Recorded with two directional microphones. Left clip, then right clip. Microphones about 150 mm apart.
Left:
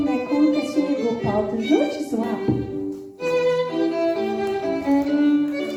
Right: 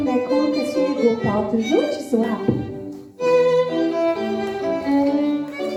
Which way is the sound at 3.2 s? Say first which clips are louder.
Right 4 dB; 25° left (ahead or behind).